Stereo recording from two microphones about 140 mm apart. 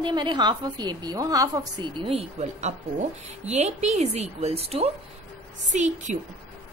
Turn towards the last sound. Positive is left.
turn(degrees=-55)  # may be behind; listen again after turning